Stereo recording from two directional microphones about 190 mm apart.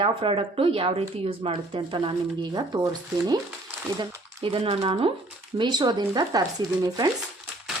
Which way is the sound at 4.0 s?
25° right (ahead or behind).